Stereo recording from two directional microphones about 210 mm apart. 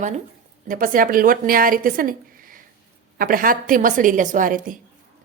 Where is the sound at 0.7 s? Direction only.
40° right (ahead or behind).